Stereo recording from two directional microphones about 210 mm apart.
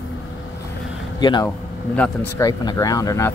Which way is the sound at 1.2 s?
20° left (ahead or behind).